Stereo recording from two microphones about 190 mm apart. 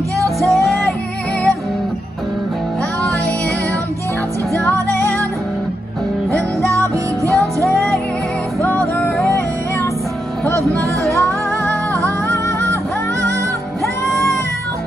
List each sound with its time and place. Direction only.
0.4 s music: centre (ahead or behind)
4.7 s music: 15° right (ahead or behind)
6.8 s music: 15° right (ahead or behind)
7.6 s music: centre (ahead or behind)
10.6 s music: 15° right (ahead or behind)
12.3 s music: 15° left (ahead or behind)